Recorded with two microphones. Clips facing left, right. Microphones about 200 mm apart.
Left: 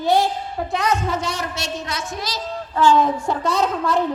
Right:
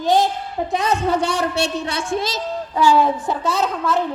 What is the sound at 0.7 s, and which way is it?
A woman's voice, 30° right (ahead or behind).